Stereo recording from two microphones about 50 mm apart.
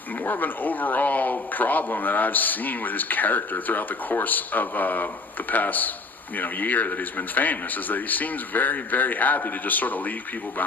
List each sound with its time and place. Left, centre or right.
0.3 s speech: left